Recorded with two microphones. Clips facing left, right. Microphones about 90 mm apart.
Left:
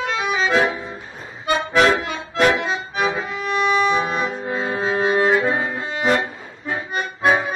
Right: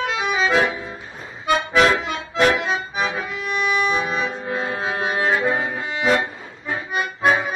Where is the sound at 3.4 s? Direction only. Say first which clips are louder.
Left 3 dB; centre (ahead or behind).